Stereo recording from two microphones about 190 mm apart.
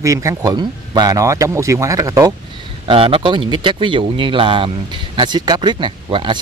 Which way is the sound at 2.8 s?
30° right (ahead or behind).